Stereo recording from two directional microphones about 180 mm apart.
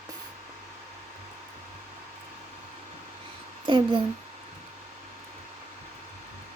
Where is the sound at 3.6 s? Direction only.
25° right (ahead or behind).